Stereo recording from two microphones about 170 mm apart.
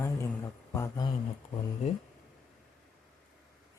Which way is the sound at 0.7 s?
20° left (ahead or behind).